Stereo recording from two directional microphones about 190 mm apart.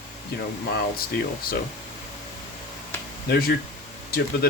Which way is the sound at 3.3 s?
55° left (ahead or behind).